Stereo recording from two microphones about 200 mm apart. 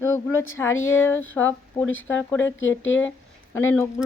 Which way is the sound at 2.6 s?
75° left (ahead or behind).